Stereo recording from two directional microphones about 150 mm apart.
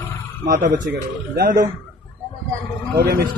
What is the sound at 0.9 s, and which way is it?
Speech, 90° right.